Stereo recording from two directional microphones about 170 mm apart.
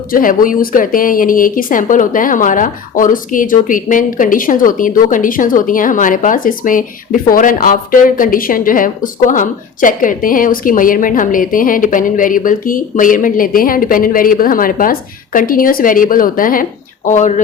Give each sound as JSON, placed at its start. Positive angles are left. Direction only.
{"t": 0.1, "sound": "a woman's voice", "side_deg": 55}